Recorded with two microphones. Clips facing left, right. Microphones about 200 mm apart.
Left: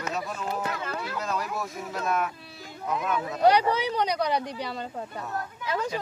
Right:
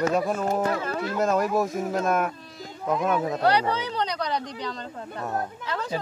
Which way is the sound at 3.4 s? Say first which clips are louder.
Left 5 dB; 10° left (ahead or behind).